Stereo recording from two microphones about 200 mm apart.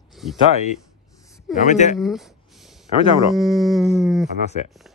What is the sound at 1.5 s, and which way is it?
Speech, 35° left (ahead or behind).